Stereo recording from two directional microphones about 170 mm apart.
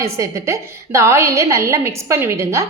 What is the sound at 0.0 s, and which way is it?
A woman's voice, 15° right (ahead or behind).